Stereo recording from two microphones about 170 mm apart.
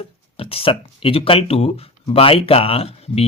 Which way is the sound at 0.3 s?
35° left (ahead or behind).